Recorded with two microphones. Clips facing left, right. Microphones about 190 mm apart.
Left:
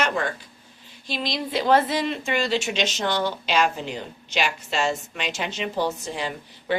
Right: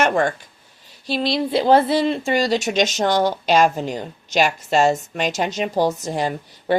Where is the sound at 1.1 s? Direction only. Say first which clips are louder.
Right 8 dB; 35° right (ahead or behind).